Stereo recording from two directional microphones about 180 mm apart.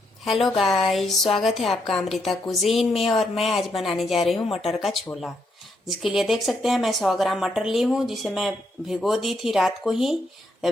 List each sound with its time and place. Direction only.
0.4 s speech: centre (ahead or behind)